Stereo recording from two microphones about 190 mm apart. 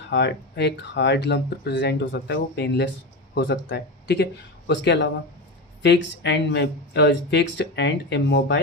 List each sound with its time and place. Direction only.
0.1 s speech: 65° left (ahead or behind)